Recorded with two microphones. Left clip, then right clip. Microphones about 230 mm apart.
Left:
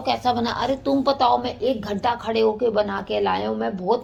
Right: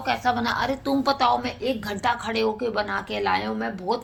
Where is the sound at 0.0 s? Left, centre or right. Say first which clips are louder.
Left 2 dB; right.